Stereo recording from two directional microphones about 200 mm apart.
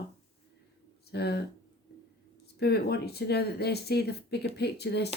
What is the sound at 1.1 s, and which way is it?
Speech, 55° left (ahead or behind).